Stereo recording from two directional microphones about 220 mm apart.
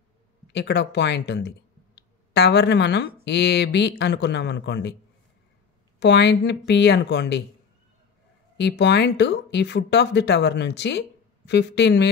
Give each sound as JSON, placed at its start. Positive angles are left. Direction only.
{"t": 0.5, "sound": "speech", "side_deg": 50}
{"t": 5.9, "sound": "speech", "side_deg": 50}
{"t": 8.5, "sound": "speech", "side_deg": 50}